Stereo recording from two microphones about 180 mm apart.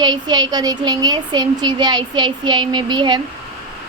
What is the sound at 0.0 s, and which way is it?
A woman's voice, 25° right (ahead or behind).